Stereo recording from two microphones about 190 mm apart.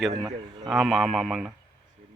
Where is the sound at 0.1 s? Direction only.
20° right (ahead or behind).